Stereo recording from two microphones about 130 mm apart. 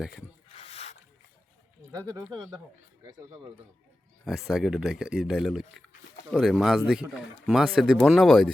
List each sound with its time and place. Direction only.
0.5 s a sound: 50° left (ahead or behind)
1.9 s speech: 30° right (ahead or behind)
4.3 s a man's voice: 5° right (ahead or behind)